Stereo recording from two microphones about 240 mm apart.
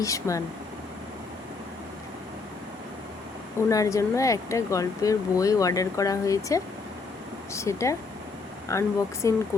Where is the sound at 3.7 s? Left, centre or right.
Centre.